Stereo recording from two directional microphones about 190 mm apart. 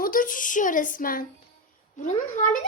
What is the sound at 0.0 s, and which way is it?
A woman's voice, 45° left (ahead or behind).